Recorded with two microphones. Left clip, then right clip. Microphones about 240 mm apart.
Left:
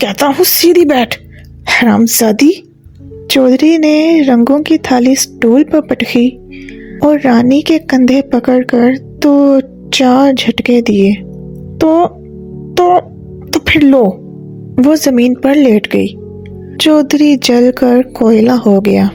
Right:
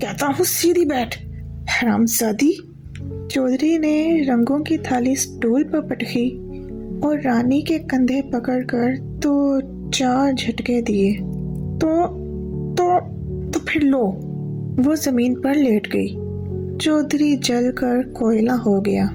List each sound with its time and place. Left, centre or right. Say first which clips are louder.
0.0 s a woman's voice: left 10 dB; left
12.7 s music: left 9 dB; left
13.5 s a woman's voice: left 11 dB; left